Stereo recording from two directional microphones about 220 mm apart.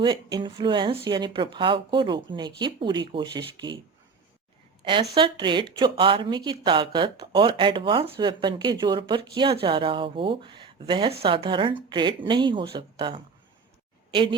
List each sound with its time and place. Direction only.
0.0 s speech: 20° right (ahead or behind)
5.1 s a woman's voice: 20° right (ahead or behind)